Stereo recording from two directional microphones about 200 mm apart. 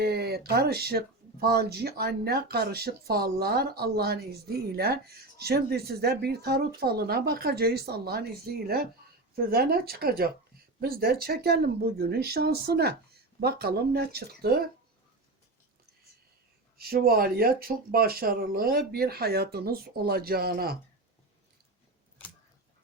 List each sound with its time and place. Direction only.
0.0 s speech: 50° right (ahead or behind)
16.7 s speech: 50° right (ahead or behind)